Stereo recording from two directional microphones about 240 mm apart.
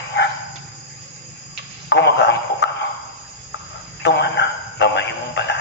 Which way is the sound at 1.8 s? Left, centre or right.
Left.